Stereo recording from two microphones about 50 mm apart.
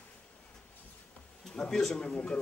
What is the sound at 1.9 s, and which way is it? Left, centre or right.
Speech, left.